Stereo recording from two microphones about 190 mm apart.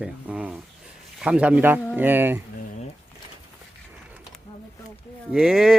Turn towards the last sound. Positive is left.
turn(degrees=0)  # may be behind; listen again after turning